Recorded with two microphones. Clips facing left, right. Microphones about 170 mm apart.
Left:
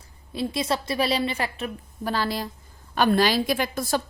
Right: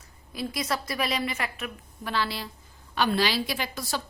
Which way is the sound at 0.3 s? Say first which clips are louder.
Left 4 dB; 25° left (ahead or behind).